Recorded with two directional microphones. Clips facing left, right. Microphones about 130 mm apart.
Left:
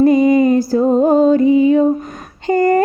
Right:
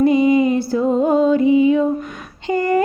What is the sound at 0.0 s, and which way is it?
Music, 45° left (ahead or behind).